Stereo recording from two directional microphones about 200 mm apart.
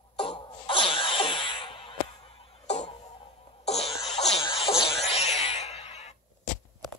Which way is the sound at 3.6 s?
30° left (ahead or behind).